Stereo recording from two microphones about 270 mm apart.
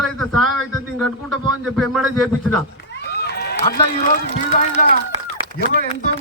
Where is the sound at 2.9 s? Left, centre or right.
Left.